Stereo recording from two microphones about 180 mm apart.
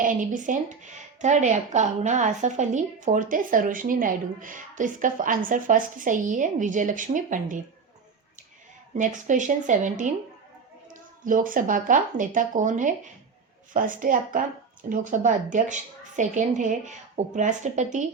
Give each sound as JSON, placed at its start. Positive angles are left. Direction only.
{"t": 0.0, "sound": "speech", "side_deg": -45}
{"t": 9.0, "sound": "speech", "side_deg": -45}